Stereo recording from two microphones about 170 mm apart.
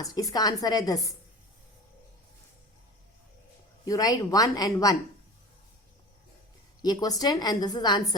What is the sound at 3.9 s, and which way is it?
A woman's voice, 20° left (ahead or behind).